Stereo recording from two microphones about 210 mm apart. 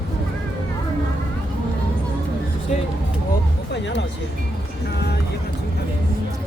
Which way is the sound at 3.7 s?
55° left (ahead or behind).